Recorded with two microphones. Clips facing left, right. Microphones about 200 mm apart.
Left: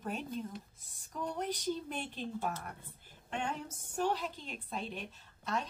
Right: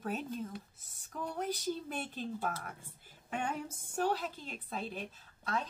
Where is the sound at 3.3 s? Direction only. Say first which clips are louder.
Right 1 dB; 5° right (ahead or behind).